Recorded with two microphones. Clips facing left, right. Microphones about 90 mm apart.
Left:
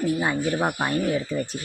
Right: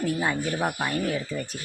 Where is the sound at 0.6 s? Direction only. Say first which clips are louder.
Left 3 dB; 20° left (ahead or behind).